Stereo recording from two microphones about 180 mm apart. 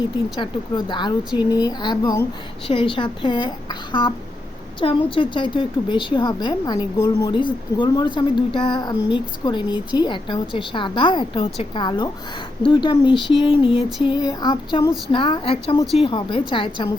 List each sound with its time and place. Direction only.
0.9 s a woman's voice: 25° left (ahead or behind)